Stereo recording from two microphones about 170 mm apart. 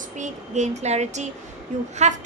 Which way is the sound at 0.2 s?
40° right (ahead or behind).